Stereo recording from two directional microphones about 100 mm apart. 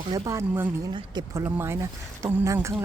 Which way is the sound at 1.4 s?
20° right (ahead or behind).